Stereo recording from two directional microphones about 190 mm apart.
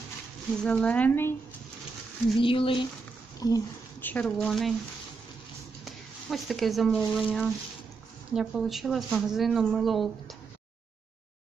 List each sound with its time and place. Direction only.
0.7 s speech: 5° left (ahead or behind)
2.3 s speech: 25° left (ahead or behind); by 4.7 s centre (ahead or behind)
5.9 s speech: centre (ahead or behind)